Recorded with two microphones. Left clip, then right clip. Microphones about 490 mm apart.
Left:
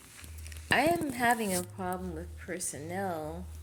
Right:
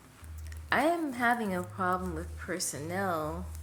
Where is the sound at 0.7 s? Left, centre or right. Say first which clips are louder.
Left 1 dB; left.